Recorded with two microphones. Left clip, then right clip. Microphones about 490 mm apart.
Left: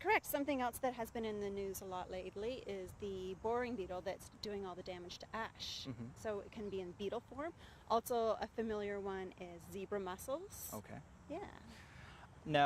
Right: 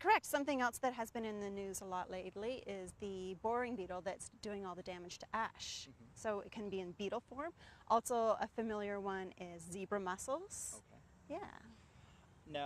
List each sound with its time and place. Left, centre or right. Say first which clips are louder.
0.0 s speech: right 2 dB; right